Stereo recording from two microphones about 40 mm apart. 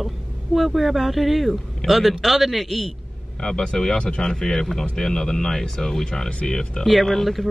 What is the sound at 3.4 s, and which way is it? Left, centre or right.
Speech, left.